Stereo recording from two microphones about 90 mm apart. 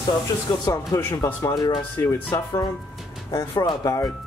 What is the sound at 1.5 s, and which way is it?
Speech, 55° left (ahead or behind).